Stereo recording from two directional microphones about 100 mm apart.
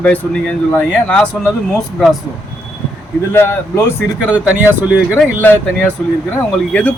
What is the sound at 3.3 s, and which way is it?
Speech, 25° left (ahead or behind).